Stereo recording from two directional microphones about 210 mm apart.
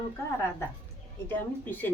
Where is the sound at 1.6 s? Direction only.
10° left (ahead or behind).